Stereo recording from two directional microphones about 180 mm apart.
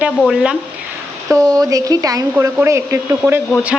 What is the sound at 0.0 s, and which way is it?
Speech, 5° right (ahead or behind).